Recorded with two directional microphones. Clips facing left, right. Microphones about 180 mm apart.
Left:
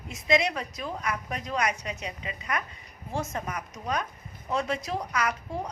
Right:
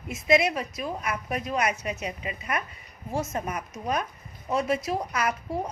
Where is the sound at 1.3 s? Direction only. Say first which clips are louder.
Right 4 dB; 15° right (ahead or behind).